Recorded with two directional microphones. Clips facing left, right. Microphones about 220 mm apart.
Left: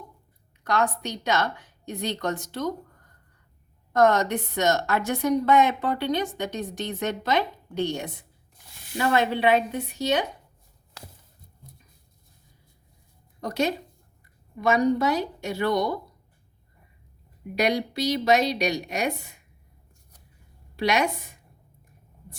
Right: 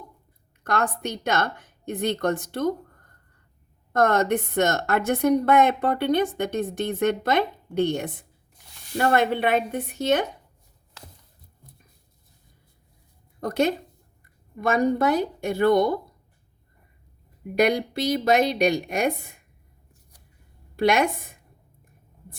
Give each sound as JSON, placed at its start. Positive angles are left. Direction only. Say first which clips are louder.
{"t": 0.6, "sound": "a woman's voice", "louder": "even", "side_deg": -50}
{"t": 13.4, "sound": "a woman's voice", "louder": "right 3 dB", "side_deg": -50}
{"t": 17.5, "sound": "a woman's voice", "louder": "right 3 dB", "side_deg": -50}
{"t": 20.7, "sound": "a woman's voice", "louder": "right 3 dB", "side_deg": -50}